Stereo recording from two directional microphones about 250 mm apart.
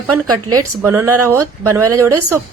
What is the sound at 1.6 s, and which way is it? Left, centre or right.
Speech, right.